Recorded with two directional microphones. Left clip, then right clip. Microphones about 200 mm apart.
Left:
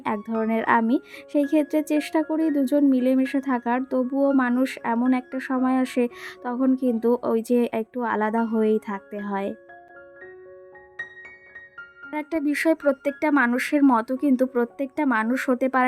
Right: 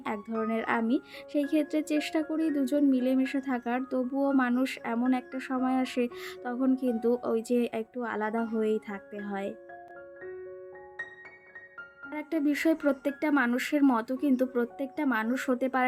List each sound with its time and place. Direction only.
0.0 s speech: 25° left (ahead or behind)
12.1 s speech: 25° left (ahead or behind)